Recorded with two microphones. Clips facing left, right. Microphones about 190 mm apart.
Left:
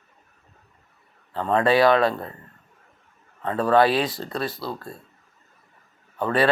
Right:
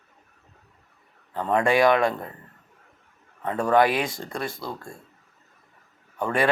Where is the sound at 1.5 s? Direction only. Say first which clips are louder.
Left 2 dB; 20° right (ahead or behind).